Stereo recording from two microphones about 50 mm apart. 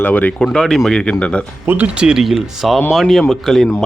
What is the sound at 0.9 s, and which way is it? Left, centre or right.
Speech, left.